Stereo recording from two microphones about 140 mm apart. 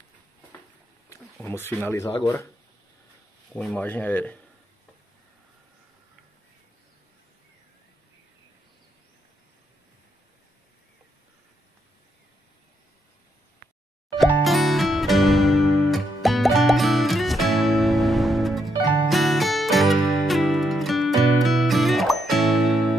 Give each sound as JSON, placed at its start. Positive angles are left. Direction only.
{"t": 1.1, "sound": "speech", "side_deg": 20}
{"t": 3.5, "sound": "speech", "side_deg": 10}
{"t": 14.1, "sound": "music", "side_deg": 0}